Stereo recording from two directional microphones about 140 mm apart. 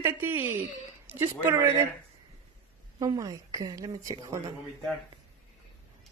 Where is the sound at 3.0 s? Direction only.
25° right (ahead or behind).